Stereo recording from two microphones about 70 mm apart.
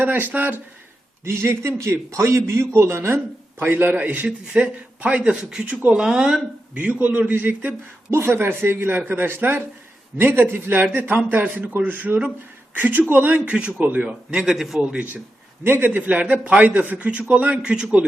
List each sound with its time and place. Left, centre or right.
0.0 s a man's voice: right
1.2 s a man's voice: right
3.6 s a man's voice: right; by 6.4 s centre
6.7 s a man's voice: right
8.1 s a man's voice: right
13.4 s a man's voice: centre
14.1 s a man's voice: centre
15.6 s a man's voice: right